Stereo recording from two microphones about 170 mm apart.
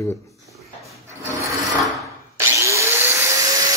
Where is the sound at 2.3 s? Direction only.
15° right (ahead or behind).